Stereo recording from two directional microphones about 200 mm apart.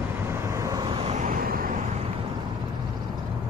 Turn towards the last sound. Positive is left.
turn(degrees=-45)  # may be behind; listen again after turning